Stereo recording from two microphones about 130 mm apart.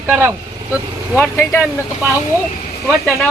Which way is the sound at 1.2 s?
15° left (ahead or behind).